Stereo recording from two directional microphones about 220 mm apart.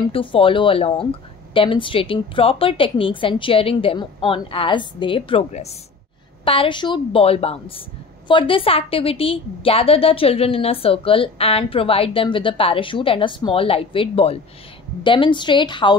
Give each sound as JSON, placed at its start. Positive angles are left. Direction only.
{"t": 0.1, "sound": "a woman's voice", "side_deg": 25}